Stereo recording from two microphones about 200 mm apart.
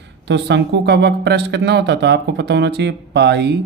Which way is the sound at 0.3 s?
60° right (ahead or behind).